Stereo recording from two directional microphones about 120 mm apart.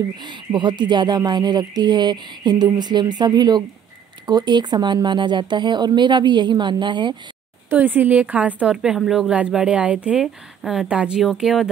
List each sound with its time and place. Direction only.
0.2 s speech: 40° right (ahead or behind)
7.7 s a woman's voice: 15° right (ahead or behind)